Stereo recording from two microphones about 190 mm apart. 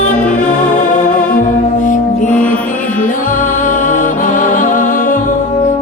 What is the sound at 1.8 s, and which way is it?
Music, 45° left (ahead or behind).